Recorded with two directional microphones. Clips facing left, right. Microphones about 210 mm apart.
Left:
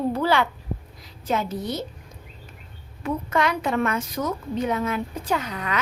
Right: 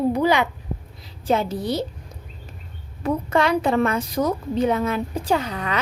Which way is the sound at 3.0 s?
30° right (ahead or behind).